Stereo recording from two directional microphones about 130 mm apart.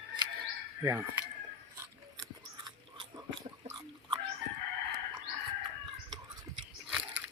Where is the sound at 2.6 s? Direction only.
35° right (ahead or behind).